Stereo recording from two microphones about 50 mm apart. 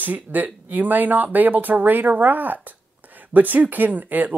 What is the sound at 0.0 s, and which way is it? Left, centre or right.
Speech, right.